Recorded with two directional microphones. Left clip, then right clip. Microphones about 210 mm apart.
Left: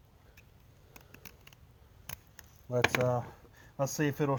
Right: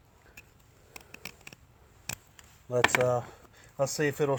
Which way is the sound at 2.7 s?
15° right (ahead or behind).